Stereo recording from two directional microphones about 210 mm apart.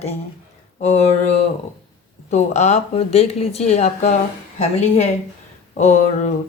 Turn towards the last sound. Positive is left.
turn(degrees=35)  # may be behind; listen again after turning